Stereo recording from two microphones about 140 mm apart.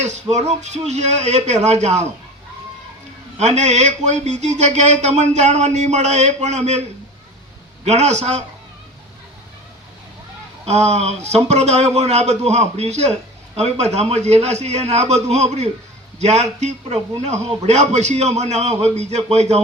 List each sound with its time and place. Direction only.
0.0 s speech: 55° right (ahead or behind)
3.3 s speech: 55° right (ahead or behind)
7.9 s speech: 50° right (ahead or behind)
10.7 s speech: 50° right (ahead or behind)